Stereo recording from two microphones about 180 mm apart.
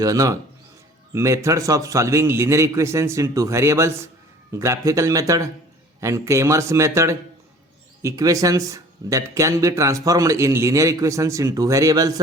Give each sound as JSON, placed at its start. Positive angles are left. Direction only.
{"t": 0.0, "sound": "speech", "side_deg": -20}